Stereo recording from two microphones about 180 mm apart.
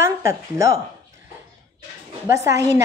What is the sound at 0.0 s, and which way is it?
Speech, 15° right (ahead or behind).